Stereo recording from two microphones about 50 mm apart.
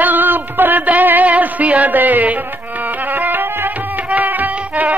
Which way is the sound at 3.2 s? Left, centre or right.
Right.